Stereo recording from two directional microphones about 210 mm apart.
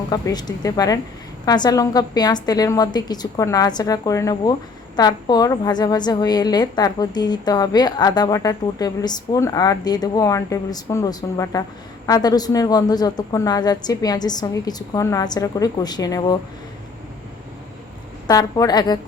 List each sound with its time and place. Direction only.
0.1 s a woman's voice: 20° left (ahead or behind)
18.3 s a woman's voice: 15° left (ahead or behind)